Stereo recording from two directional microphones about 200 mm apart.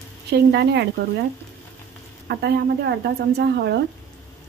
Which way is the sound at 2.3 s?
55° right (ahead or behind).